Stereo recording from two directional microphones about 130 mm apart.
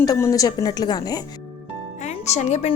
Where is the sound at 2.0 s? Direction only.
60° left (ahead or behind).